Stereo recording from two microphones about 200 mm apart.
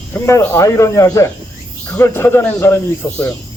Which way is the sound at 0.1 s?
15° left (ahead or behind).